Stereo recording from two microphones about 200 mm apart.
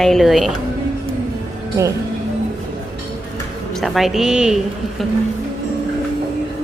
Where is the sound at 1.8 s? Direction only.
15° right (ahead or behind).